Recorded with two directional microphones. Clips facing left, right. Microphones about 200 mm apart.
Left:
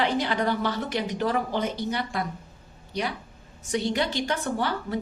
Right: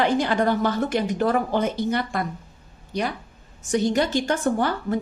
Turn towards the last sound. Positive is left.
turn(degrees=-50)  # may be behind; listen again after turning